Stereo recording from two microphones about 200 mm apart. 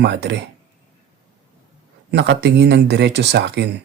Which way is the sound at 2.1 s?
55° right (ahead or behind).